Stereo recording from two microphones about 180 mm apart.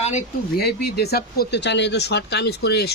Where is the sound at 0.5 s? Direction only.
65° left (ahead or behind).